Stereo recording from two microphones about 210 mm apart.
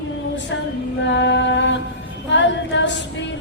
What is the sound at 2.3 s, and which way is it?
Female singing, 60° left (ahead or behind).